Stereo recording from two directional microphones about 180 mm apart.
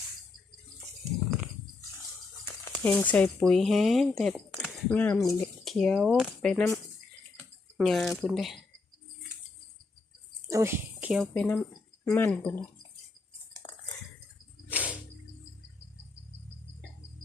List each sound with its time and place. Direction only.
2.8 s speech: 10° left (ahead or behind)
7.8 s speech: centre (ahead or behind)
10.5 s speech: 15° right (ahead or behind)
11.2 s speech: 5° left (ahead or behind)
13.6 s a sound: 30° left (ahead or behind)
14.7 s cricket: 10° right (ahead or behind)